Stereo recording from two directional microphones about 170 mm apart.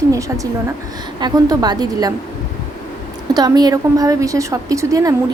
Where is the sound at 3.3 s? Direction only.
25° right (ahead or behind).